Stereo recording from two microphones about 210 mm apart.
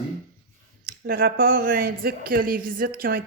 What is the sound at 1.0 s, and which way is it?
Speech, 45° right (ahead or behind).